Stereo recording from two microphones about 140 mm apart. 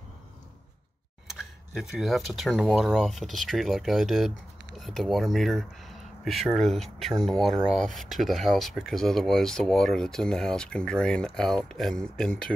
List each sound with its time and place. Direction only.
1.4 s speech: 5° right (ahead or behind)